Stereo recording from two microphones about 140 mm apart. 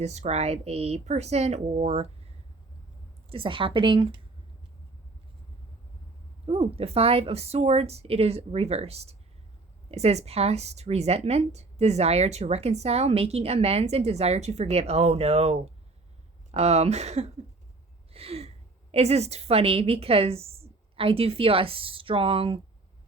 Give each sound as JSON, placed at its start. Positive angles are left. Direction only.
{"t": 0.0, "sound": "a woman's voice", "side_deg": -55}
{"t": 3.2, "sound": "speech", "side_deg": -40}
{"t": 6.4, "sound": "a woman's voice", "side_deg": -45}